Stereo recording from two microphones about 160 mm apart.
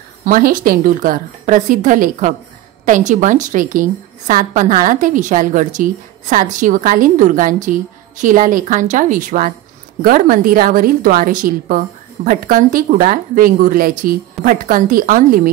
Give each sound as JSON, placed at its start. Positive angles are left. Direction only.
{"t": 0.2, "sound": "a woman's voice", "side_deg": -60}